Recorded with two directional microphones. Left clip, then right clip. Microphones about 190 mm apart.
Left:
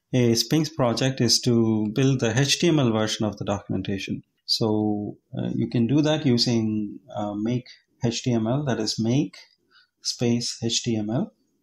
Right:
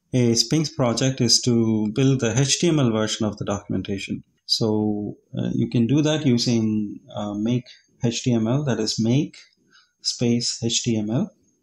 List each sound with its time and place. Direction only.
0.1 s speech: 30° left (ahead or behind)